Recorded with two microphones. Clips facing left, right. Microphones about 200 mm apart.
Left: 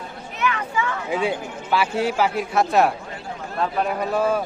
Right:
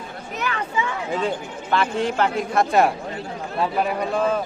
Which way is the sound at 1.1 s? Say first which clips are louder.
Left 2 dB; 10° left (ahead or behind).